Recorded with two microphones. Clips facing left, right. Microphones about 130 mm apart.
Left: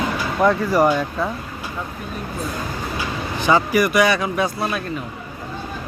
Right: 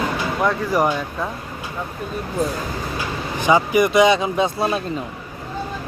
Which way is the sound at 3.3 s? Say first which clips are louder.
Right 1 dB; 15° right (ahead or behind).